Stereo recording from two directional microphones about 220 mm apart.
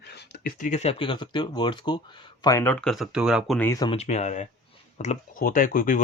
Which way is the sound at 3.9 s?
30° left (ahead or behind).